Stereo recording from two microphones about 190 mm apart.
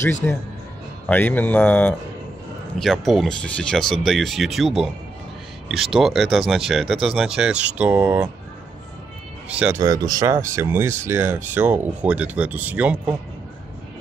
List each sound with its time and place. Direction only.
0.2 s speech: 5° left (ahead or behind); by 8.3 s 10° right (ahead or behind)
9.5 s speech: 5° right (ahead or behind)
9.8 s speech: 20° right (ahead or behind)